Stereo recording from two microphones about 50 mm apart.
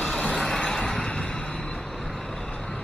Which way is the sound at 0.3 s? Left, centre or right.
Centre.